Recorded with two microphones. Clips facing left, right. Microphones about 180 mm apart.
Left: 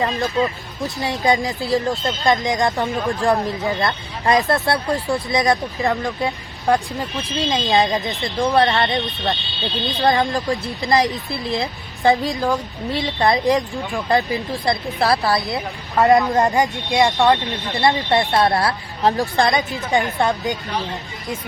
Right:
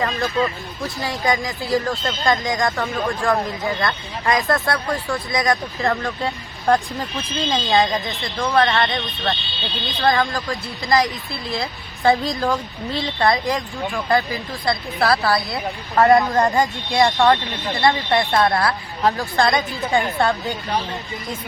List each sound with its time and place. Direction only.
0.0 s speech: 20° left (ahead or behind)